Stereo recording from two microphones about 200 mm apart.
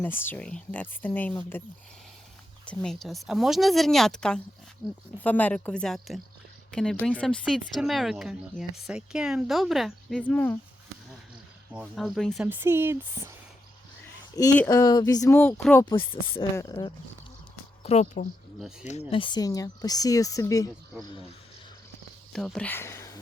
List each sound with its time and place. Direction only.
0.0 s speech: 10° left (ahead or behind)
2.6 s speech: centre (ahead or behind)
5.2 s speech: 10° left (ahead or behind)
11.7 s speech: 5° right (ahead or behind)
14.4 s speech: 20° left (ahead or behind)
15.8 s speech: 25° left (ahead or behind)
17.8 s speech: 35° left (ahead or behind)
19.1 s speech: 25° left (ahead or behind)
22.3 s speech: centre (ahead or behind)